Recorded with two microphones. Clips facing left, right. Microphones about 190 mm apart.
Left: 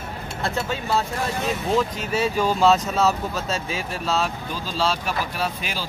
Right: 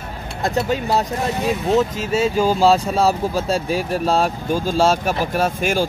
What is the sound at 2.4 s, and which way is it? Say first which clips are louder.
Speech: right 2 dB; 30° right (ahead or behind).